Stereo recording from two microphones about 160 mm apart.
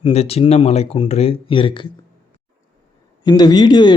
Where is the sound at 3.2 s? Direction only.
25° left (ahead or behind).